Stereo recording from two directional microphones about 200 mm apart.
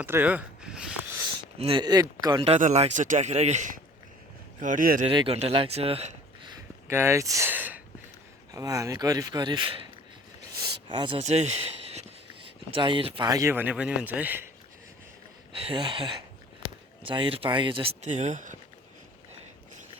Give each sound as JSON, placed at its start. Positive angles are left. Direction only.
{"t": 0.0, "sound": "a sound", "side_deg": -10}
{"t": 1.5, "sound": "speech", "side_deg": -30}
{"t": 2.6, "sound": "speech", "side_deg": -35}
{"t": 5.0, "sound": "speech", "side_deg": -25}
{"t": 6.8, "sound": "a man's voice", "side_deg": -15}
{"t": 10.6, "sound": "a sound", "side_deg": -25}
{"t": 12.7, "sound": "a man's voice", "side_deg": -25}
{"t": 15.5, "sound": "speech", "side_deg": -25}